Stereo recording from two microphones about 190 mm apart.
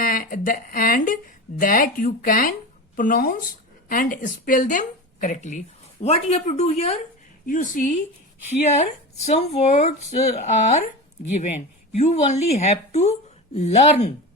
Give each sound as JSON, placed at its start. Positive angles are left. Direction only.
{"t": 0.0, "sound": "speech", "side_deg": 45}
{"t": 7.4, "sound": "speech", "side_deg": 45}